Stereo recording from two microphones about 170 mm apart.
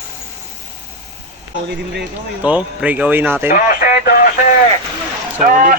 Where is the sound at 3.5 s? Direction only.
55° left (ahead or behind).